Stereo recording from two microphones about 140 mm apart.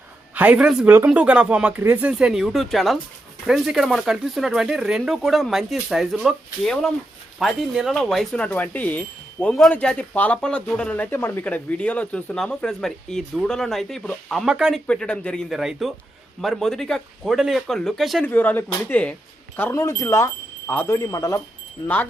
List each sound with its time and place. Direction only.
0.3 s speech: 10° right (ahead or behind)
14.8 s speech: 5° left (ahead or behind)
18.3 s speech: 15° left (ahead or behind)